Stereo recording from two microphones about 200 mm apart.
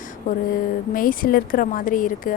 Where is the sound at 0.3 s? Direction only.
40° left (ahead or behind).